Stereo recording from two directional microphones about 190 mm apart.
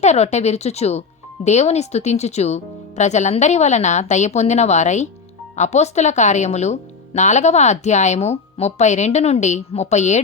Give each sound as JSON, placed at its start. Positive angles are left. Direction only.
{"t": 0.0, "sound": "speech", "side_deg": 35}